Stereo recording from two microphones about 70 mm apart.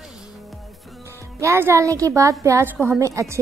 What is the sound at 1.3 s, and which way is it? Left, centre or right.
A woman's voice, right.